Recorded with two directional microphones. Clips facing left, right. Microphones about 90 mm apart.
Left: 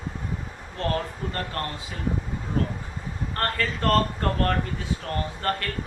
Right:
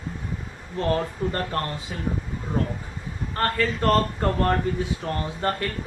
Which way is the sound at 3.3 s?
5° right (ahead or behind).